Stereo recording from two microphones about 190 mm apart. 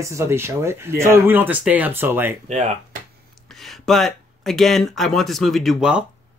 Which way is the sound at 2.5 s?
40° right (ahead or behind).